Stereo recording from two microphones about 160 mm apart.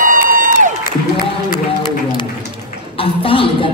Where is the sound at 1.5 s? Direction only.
25° left (ahead or behind).